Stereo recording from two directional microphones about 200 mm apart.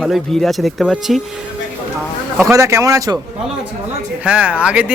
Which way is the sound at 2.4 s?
15° right (ahead or behind).